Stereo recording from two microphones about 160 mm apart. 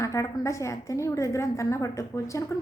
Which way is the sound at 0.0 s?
20° left (ahead or behind).